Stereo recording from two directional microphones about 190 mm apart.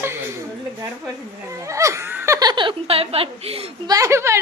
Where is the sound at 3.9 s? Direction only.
15° right (ahead or behind).